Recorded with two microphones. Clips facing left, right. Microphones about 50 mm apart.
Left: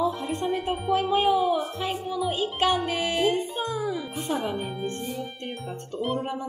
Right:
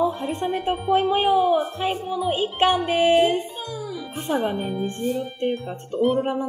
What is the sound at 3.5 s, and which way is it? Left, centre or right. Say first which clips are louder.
Music: left 4 dB; left.